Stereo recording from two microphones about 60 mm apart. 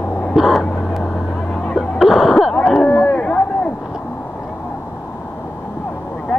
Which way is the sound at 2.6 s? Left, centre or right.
Centre.